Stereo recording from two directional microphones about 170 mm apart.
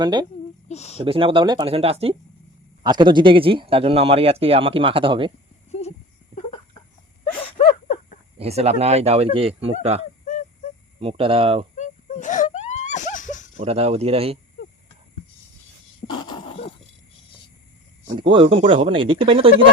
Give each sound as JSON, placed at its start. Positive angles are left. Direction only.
{"t": 0.0, "sound": "speech", "side_deg": -25}
{"t": 0.7, "sound": "speech", "side_deg": 40}
{"t": 0.9, "sound": "speech", "side_deg": -30}
{"t": 8.4, "sound": "speech", "side_deg": -40}
{"t": 11.0, "sound": "speech", "side_deg": -30}
{"t": 11.8, "sound": "wheeze", "side_deg": 45}
{"t": 13.6, "sound": "speech", "side_deg": -35}
{"t": 14.6, "sound": "a sound", "side_deg": 65}
{"t": 16.0, "sound": "a sound", "side_deg": 25}
{"t": 18.2, "sound": "speech", "side_deg": -30}